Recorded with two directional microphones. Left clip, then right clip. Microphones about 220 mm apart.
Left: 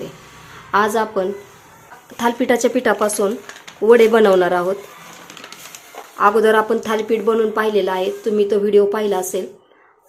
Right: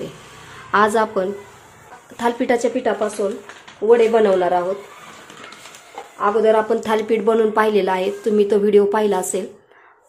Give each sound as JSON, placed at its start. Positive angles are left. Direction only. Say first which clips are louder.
{"t": 0.7, "sound": "a woman's voice", "louder": "right 1 dB", "side_deg": -5}
{"t": 6.1, "sound": "speech", "louder": "left 2 dB", "side_deg": 20}
{"t": 6.7, "sound": "a woman's voice", "louder": "even", "side_deg": 0}